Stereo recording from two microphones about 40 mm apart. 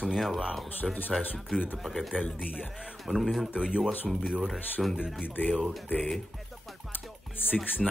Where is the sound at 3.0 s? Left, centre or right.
Centre.